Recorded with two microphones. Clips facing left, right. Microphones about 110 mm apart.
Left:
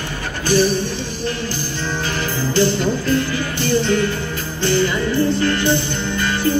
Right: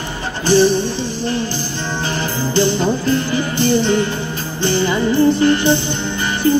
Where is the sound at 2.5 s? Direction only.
25° right (ahead or behind).